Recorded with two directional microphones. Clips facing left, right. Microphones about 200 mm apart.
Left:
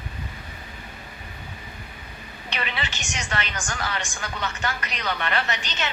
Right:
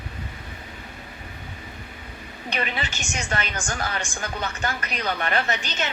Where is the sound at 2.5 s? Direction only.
45° right (ahead or behind).